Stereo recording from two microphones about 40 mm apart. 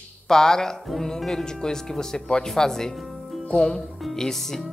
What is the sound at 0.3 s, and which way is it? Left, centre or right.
Speech, centre.